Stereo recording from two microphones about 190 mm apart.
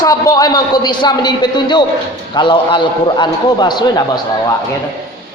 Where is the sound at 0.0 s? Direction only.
20° left (ahead or behind).